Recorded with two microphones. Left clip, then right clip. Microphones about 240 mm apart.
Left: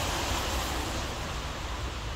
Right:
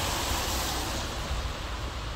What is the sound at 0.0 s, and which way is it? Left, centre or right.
Vehicle, right.